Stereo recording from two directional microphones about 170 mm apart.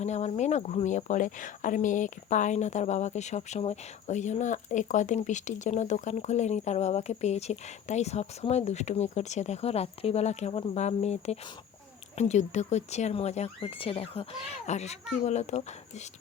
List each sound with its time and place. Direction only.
0.0 s speech: 40° left (ahead or behind)